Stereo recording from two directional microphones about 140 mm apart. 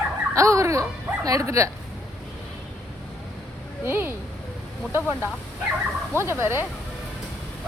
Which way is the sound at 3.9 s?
15° right (ahead or behind).